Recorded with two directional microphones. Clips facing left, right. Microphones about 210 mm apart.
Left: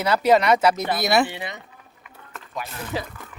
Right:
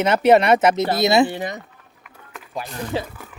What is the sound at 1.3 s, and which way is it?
Speech, 40° right (ahead or behind).